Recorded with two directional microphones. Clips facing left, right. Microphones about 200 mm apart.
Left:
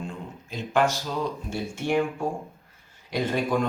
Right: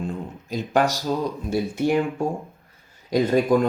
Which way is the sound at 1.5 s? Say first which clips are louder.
Right 6 dB; 40° right (ahead or behind).